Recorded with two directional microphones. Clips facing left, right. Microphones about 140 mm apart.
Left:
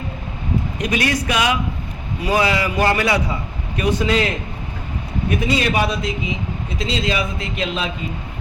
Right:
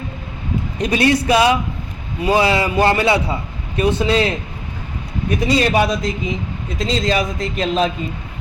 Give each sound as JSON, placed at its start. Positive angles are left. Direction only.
{"t": 0.8, "sound": "a man's voice", "side_deg": -30}
{"t": 5.5, "sound": "a man's voice", "side_deg": -40}